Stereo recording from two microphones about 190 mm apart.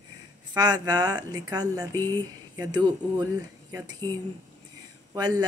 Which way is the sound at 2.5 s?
20° right (ahead or behind).